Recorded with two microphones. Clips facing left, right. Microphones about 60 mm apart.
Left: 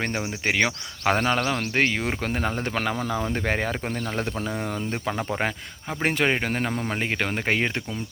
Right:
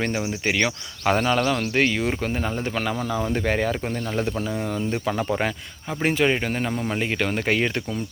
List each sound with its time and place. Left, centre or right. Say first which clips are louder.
0.0 s speech: right 2 dB; left
1.4 s a man's voice: right 3 dB; left
1.8 s speech: right 1 dB; left
2.2 s speech: right 1 dB; left
3.3 s a man's voice: right 3 dB; left
4.2 s speech: right 4 dB; left
5.0 s a man's voice: right 1 dB; left
6.0 s speech: right 2 dB; left